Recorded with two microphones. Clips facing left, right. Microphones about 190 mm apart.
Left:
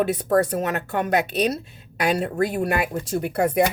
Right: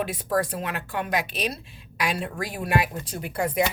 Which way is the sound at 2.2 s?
45° left (ahead or behind).